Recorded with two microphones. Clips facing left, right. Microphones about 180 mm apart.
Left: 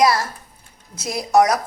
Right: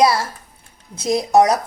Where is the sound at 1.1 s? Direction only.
30° right (ahead or behind).